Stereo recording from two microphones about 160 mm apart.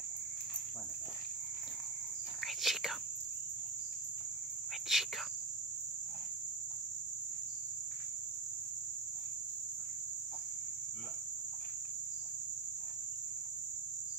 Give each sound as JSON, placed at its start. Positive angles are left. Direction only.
{"t": 2.4, "sound": "whispering", "side_deg": 0}
{"t": 4.9, "sound": "cricket", "side_deg": 0}